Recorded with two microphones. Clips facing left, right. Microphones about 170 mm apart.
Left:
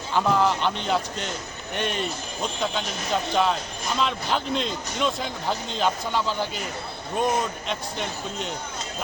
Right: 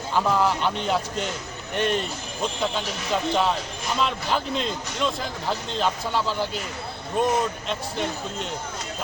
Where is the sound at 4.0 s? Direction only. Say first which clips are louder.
Right 1 dB; centre (ahead or behind).